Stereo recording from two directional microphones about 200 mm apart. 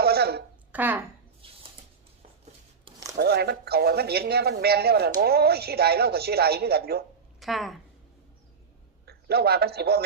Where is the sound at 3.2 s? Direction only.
55° right (ahead or behind).